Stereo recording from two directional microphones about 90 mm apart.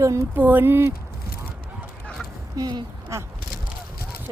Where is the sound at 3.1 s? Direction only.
30° right (ahead or behind).